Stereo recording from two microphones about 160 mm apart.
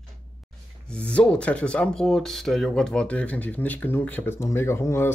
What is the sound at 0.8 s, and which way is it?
Speech, 5° left (ahead or behind).